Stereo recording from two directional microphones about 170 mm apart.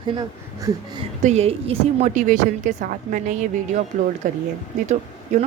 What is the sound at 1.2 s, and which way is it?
A woman's voice, 40° right (ahead or behind).